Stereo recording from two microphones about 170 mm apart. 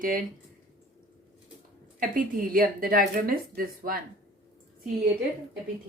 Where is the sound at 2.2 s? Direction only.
55° right (ahead or behind).